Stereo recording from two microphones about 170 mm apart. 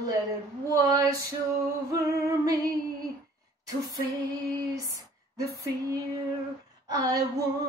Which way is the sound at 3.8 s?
20° right (ahead or behind).